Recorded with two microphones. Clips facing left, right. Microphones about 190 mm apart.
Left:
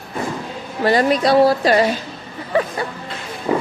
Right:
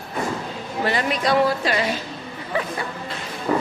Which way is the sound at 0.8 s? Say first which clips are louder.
Left 7 dB; 35° left (ahead or behind).